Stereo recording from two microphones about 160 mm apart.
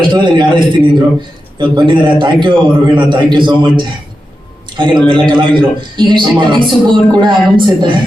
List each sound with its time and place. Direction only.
0.1 s a man's voice: 30° right (ahead or behind)